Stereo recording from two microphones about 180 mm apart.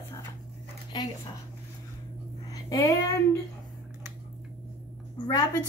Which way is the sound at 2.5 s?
20° left (ahead or behind).